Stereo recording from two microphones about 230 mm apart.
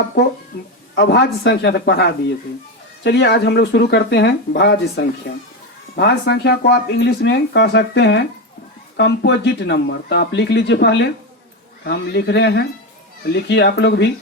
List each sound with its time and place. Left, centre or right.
0.9 s speech: left